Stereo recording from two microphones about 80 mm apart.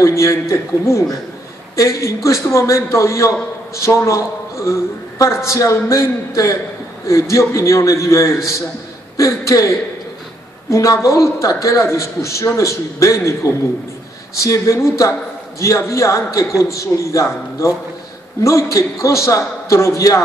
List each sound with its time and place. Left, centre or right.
0.0 s a woman's voice: left
14.3 s a woman's voice: left